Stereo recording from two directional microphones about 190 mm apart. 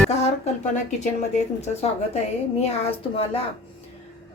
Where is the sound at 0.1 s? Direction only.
35° left (ahead or behind).